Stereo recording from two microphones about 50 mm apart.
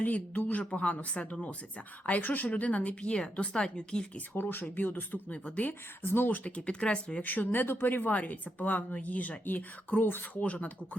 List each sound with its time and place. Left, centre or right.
0.0 s a woman's voice: left
2.0 s a woman's voice: left; by 4.0 s centre
4.4 s a woman's voice: left
6.0 s speech: left
6.7 s a woman's voice: left
7.2 s speech: left
10.0 s speech: left
10.4 s a woman's voice: left